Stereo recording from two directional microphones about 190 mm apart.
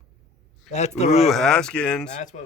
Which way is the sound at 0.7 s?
35° left (ahead or behind).